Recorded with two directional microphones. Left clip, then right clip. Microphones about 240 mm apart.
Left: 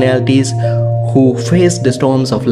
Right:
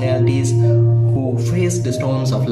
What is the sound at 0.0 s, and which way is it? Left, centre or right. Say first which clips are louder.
Speech: left 7 dB; left.